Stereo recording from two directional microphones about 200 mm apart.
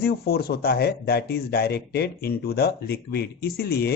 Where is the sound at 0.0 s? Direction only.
50° left (ahead or behind).